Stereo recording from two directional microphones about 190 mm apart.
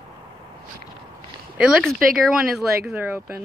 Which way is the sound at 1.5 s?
5° right (ahead or behind).